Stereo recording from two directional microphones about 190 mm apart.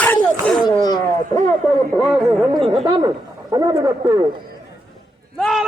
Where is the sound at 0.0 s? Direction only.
5° left (ahead or behind).